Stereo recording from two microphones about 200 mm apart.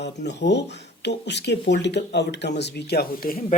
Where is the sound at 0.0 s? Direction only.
60° left (ahead or behind).